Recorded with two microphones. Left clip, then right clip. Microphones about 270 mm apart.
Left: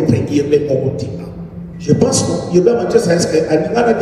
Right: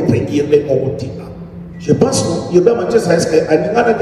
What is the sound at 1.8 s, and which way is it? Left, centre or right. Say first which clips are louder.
A man's voice: right 1 dB; right.